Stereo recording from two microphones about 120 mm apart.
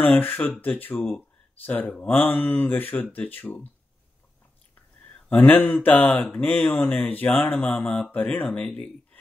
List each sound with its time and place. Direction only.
0.0 s speech: 15° left (ahead or behind)
5.3 s speech: 15° left (ahead or behind)